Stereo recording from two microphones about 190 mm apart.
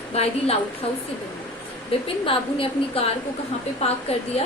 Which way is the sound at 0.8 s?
30° left (ahead or behind).